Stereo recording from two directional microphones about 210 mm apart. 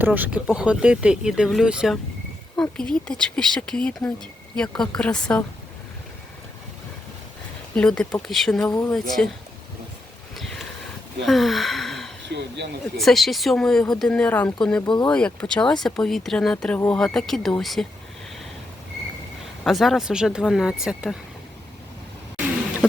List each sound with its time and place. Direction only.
0.0 s speech: 10° right (ahead or behind)
7.8 s speech: 5° left (ahead or behind)
10.3 s a sound: centre (ahead or behind)
11.3 s speech: centre (ahead or behind)
14.8 s speech: 20° left (ahead or behind)
15.1 s speech: 5° left (ahead or behind)
19.6 s speech: centre (ahead or behind)
22.8 s a sound: 5° right (ahead or behind)